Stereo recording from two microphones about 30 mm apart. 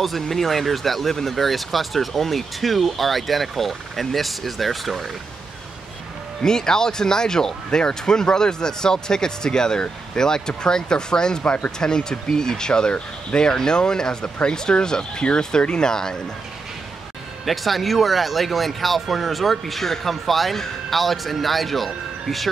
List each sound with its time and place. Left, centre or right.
0.0 s speech: centre
6.4 s speech: left
17.5 s speech: centre